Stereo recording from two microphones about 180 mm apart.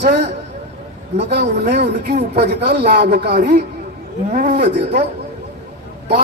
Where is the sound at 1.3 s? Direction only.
65° right (ahead or behind).